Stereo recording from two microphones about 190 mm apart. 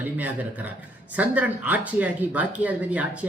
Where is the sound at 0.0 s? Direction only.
10° right (ahead or behind).